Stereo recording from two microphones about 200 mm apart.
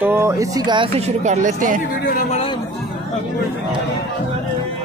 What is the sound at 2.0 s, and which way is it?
Speech, 50° left (ahead or behind).